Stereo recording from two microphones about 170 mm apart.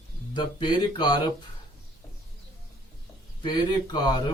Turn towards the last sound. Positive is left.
turn(degrees=25)  # may be behind; listen again after turning